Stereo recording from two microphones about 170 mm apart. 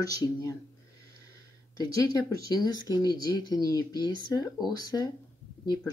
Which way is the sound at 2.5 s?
20° left (ahead or behind).